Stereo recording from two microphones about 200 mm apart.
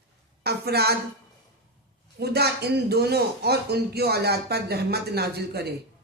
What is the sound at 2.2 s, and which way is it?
A man's voice, 55° right (ahead or behind).